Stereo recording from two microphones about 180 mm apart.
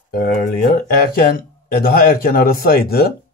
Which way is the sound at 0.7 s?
55° left (ahead or behind).